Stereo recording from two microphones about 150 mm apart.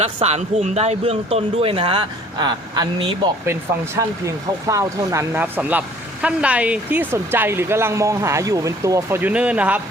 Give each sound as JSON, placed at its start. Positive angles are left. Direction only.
{"t": 0.0, "sound": "speech", "side_deg": -45}
{"t": 3.4, "sound": "speech", "side_deg": -15}